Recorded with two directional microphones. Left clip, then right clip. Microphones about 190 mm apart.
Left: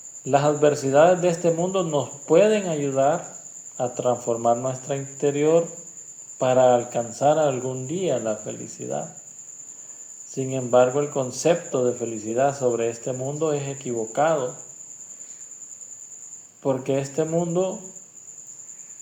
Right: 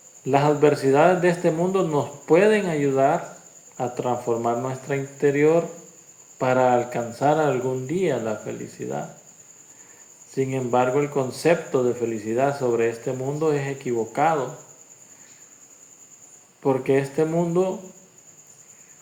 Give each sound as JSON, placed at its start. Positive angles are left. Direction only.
{"t": 0.3, "sound": "speech", "side_deg": 30}
{"t": 10.3, "sound": "speech", "side_deg": 30}
{"t": 16.6, "sound": "speech", "side_deg": 30}